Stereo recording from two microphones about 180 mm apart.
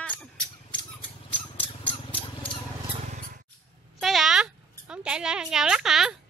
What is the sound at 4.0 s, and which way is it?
Speech, centre (ahead or behind).